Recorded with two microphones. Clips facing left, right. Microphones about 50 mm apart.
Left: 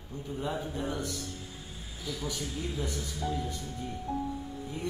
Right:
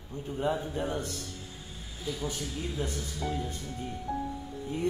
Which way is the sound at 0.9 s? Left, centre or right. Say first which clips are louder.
Right 1 dB; right.